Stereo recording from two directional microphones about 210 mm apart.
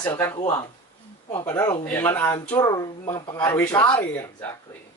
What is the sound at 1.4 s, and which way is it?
Speech, 10° left (ahead or behind).